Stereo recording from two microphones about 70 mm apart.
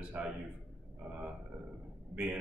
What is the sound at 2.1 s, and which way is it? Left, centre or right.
Speech, centre.